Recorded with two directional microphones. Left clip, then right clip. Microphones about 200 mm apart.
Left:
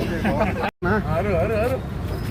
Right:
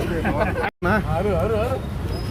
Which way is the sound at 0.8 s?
60° right (ahead or behind).